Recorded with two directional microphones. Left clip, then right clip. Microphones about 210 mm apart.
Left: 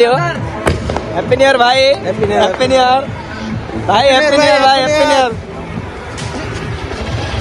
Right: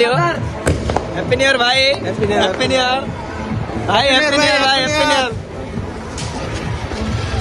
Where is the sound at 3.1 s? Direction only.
45° right (ahead or behind).